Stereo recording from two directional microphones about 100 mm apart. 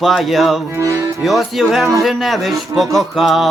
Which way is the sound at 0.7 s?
30° right (ahead or behind).